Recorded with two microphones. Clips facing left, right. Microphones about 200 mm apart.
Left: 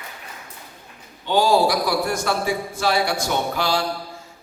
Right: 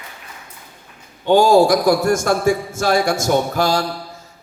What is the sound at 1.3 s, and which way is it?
A man's voice, 50° right (ahead or behind).